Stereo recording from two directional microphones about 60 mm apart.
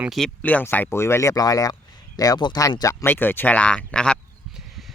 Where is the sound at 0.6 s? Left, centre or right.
Left.